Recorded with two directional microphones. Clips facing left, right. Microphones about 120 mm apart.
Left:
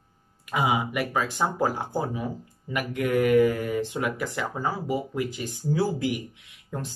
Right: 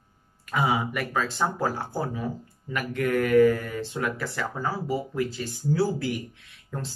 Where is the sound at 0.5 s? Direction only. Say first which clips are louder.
Even; 15° left (ahead or behind).